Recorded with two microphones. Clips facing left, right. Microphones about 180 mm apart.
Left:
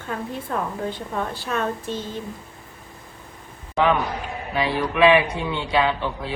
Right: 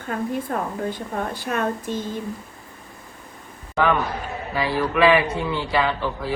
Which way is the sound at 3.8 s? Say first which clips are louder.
Even; 15° left (ahead or behind).